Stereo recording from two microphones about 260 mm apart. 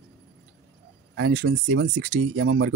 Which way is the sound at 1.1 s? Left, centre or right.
Right.